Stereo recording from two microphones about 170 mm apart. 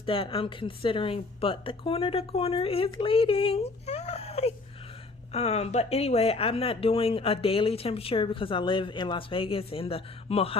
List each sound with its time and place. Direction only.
0.0 s speech: 35° left (ahead or behind)